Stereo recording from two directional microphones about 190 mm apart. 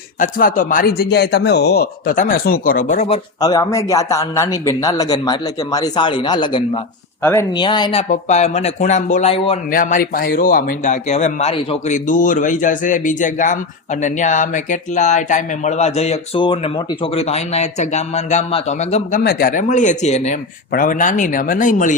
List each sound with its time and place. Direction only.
0.2 s speech: 45° left (ahead or behind)
3.4 s a man's voice: 20° left (ahead or behind)
7.2 s speech: 15° left (ahead or behind)
7.6 s a man's voice: 25° left (ahead or behind)
8.1 s speech: 35° left (ahead or behind)
9.6 s speech: 45° left (ahead or behind)
19.2 s speech: 50° left (ahead or behind)